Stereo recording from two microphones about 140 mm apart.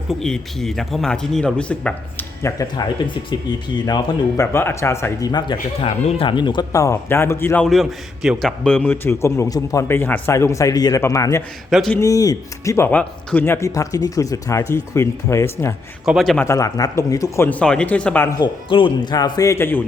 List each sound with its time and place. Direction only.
0.1 s speech: 5° left (ahead or behind)
2.4 s speech: 25° left (ahead or behind)
4.5 s speech: 20° left (ahead or behind)
5.3 s speech: 35° left (ahead or behind); by 7.6 s 15° left (ahead or behind)
7.6 s a man's voice: centre (ahead or behind); by 11.4 s 20° left (ahead or behind)
11.7 s speech: centre (ahead or behind)
11.9 s speech: 25° left (ahead or behind)
16.0 s speech: centre (ahead or behind)
16.4 s a man's voice: 20° left (ahead or behind)
18.3 s speech: 30° left (ahead or behind)